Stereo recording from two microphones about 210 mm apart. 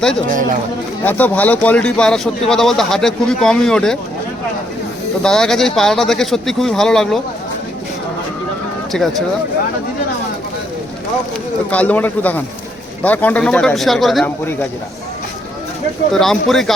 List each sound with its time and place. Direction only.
0.3 s speech: 40° right (ahead or behind)
1.0 s speech: 5° left (ahead or behind)
5.2 s speech: 5° left (ahead or behind)
11.7 s a man's voice: 5° left (ahead or behind)
16.1 s speech: centre (ahead or behind)